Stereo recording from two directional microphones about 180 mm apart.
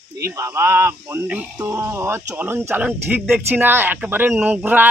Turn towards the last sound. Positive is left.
turn(degrees=-10)  # may be behind; listen again after turning